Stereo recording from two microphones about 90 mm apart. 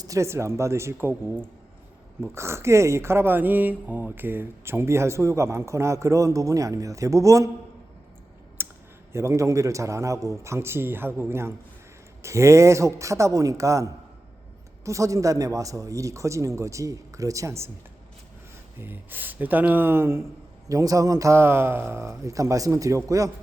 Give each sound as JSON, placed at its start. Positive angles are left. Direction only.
{"t": 0.0, "sound": "speech", "side_deg": -35}
{"t": 8.6, "sound": "a sound", "side_deg": -25}
{"t": 9.1, "sound": "speech", "side_deg": -35}
{"t": 18.8, "sound": "speech", "side_deg": -20}
{"t": 20.7, "sound": "speech", "side_deg": -40}